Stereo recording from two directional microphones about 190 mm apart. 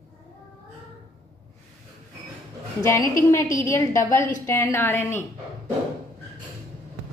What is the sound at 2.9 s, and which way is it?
A woman's voice, 15° left (ahead or behind).